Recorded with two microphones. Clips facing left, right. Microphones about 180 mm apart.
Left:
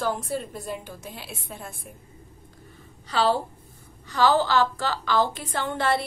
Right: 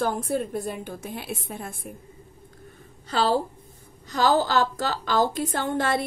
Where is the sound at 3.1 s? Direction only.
45° right (ahead or behind).